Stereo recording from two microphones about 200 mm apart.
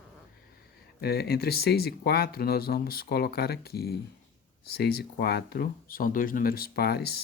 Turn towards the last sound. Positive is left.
turn(degrees=50)  # may be behind; listen again after turning